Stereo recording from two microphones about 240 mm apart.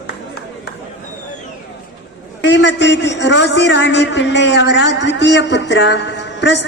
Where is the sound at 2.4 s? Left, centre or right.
Left.